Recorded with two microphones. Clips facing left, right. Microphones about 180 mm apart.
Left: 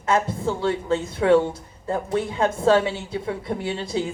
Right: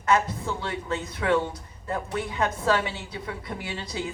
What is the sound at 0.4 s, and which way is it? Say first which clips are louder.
Speech: left 8 dB; 30° left (ahead or behind).